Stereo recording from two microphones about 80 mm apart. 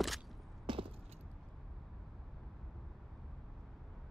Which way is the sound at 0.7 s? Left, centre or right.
Right.